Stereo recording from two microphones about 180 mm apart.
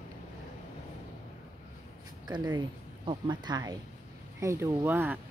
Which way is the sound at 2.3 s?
20° right (ahead or behind).